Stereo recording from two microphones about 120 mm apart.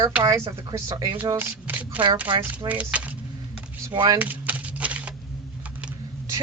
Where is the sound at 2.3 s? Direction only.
45° right (ahead or behind).